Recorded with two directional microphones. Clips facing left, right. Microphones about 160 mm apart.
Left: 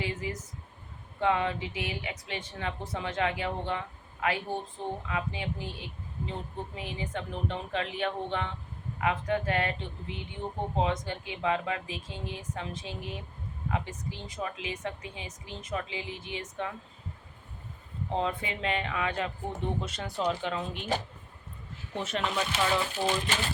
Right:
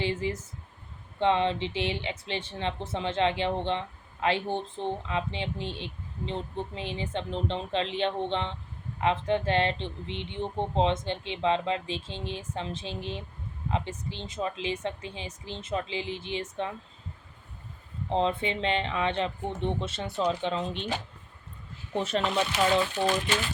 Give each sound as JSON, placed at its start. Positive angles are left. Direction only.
{"t": 0.0, "sound": "speech", "side_deg": -30}
{"t": 18.1, "sound": "speech", "side_deg": -25}
{"t": 21.9, "sound": "speech", "side_deg": -35}